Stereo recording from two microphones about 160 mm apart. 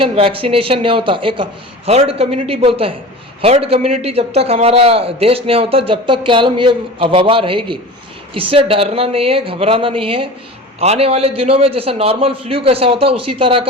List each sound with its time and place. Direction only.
0.0 s a man's voice: 35° right (ahead or behind)